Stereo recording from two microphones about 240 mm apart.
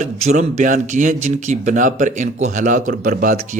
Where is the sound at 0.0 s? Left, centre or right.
Right.